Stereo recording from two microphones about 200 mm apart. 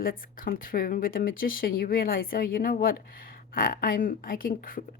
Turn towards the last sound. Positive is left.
turn(degrees=45)  # may be behind; listen again after turning